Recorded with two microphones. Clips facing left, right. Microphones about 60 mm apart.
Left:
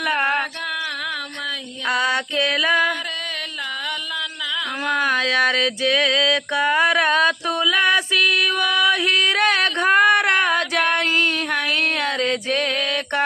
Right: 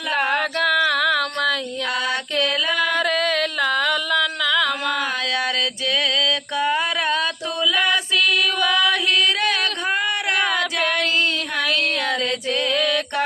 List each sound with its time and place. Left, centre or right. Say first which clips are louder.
1.9 s music: left 5 dB; left
4.9 s a sound: left 4 dB; left
9.4 s female singing: left 4 dB; left
12.2 s music: left 2 dB; left